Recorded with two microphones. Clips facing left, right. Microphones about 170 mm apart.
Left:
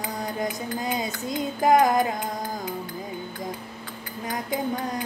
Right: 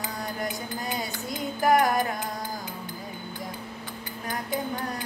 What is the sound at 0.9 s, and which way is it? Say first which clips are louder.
Music: left 4 dB; 20° left (ahead or behind).